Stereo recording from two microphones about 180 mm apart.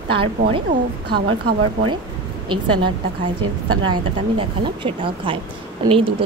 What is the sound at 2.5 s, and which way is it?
Speech, 25° right (ahead or behind).